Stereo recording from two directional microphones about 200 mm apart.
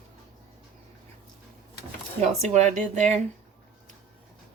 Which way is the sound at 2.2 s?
35° right (ahead or behind).